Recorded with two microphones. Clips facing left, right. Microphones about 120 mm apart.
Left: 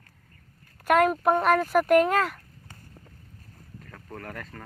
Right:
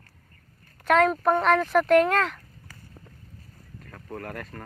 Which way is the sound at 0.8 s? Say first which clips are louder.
Even; 10° left (ahead or behind).